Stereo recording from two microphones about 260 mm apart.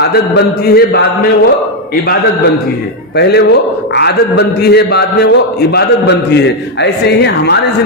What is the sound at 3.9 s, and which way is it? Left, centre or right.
A man's voice, left.